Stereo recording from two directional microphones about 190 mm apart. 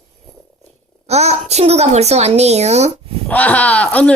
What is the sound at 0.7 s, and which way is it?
A woman's voice, 35° right (ahead or behind).